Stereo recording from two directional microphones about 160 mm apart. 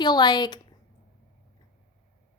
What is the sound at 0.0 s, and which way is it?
Speech, 25° left (ahead or behind).